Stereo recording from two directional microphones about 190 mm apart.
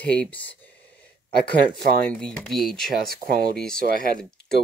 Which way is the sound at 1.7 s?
50° right (ahead or behind).